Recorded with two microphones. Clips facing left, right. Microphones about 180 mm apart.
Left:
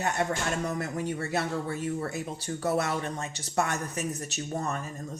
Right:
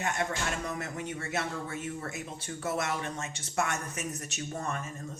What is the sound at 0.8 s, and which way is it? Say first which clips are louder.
Speech: left 5 dB; 35° left (ahead or behind).